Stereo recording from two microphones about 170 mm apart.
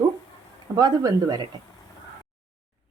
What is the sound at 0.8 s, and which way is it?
Speech, 25° right (ahead or behind).